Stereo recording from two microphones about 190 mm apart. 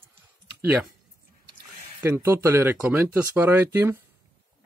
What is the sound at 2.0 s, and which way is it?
Speech, 10° right (ahead or behind).